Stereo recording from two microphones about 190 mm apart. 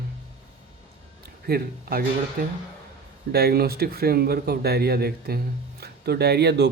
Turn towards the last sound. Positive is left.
turn(degrees=-60)  # may be behind; listen again after turning